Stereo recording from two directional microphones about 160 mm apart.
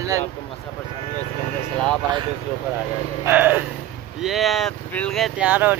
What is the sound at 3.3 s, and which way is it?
Speech, 10° right (ahead or behind).